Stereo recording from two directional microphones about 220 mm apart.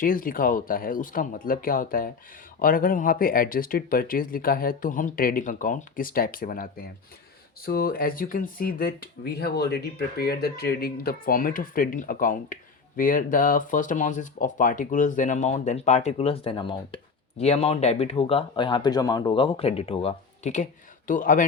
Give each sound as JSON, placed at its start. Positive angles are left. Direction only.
{"t": 0.0, "sound": "speech", "side_deg": 40}